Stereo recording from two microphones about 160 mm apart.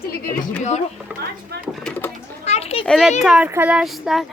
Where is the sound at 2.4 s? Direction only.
40° left (ahead or behind).